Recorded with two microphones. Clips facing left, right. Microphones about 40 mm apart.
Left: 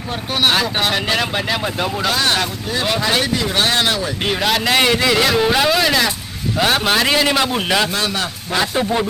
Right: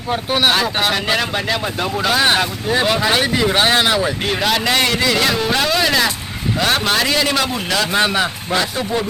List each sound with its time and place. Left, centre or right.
0.3 s speech: centre
2.2 s speech: centre
2.8 s speech: centre
4.2 s a man's voice: centre
7.9 s speech: right
8.7 s a man's voice: centre